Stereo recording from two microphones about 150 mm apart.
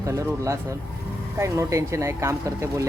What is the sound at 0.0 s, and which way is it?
Speech, 20° right (ahead or behind).